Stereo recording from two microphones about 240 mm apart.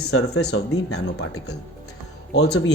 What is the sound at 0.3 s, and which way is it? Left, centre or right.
Speech, left.